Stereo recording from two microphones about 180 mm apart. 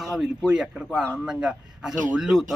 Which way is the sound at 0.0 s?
Centre (ahead or behind).